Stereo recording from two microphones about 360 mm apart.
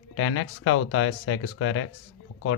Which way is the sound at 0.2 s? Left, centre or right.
Left.